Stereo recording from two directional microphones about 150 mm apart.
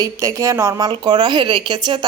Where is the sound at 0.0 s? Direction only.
20° right (ahead or behind).